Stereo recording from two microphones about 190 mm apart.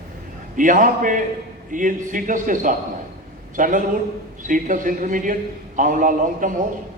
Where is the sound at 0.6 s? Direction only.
45° right (ahead or behind).